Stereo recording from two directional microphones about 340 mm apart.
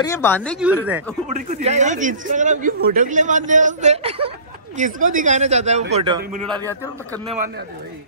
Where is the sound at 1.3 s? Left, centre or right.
Centre.